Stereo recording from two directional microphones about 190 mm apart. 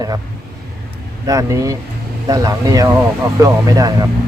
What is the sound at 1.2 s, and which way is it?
Speech, 15° right (ahead or behind).